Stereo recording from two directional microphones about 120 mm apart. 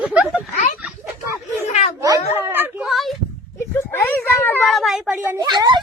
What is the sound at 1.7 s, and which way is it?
Speech, 65° left (ahead or behind).